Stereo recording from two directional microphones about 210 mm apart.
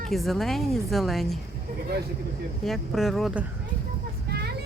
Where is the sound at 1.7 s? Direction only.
45° right (ahead or behind).